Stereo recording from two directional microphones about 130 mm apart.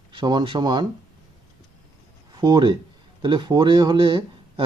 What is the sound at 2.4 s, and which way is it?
Speech, 35° right (ahead or behind).